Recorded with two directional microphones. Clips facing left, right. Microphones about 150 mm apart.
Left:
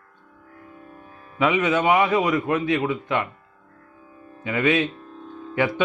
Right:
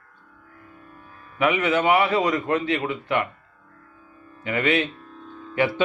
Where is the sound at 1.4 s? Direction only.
15° left (ahead or behind).